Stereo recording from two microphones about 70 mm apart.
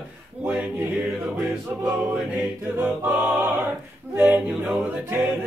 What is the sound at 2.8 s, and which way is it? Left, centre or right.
Music, right.